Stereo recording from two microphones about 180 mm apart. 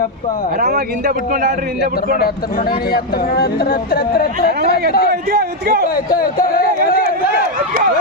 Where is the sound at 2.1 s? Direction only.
55° left (ahead or behind).